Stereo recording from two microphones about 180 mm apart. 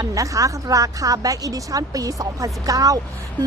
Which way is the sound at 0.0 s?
20° right (ahead or behind).